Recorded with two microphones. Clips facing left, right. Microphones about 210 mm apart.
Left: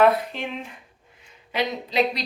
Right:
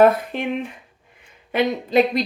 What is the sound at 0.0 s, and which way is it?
Speech, 50° right (ahead or behind).